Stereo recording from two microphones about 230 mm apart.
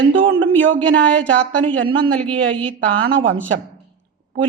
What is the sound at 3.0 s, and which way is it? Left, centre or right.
Speech, right.